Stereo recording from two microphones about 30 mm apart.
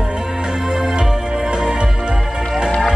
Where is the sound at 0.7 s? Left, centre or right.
Right.